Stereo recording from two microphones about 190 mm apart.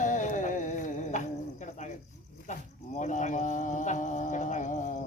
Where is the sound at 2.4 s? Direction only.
40° left (ahead or behind).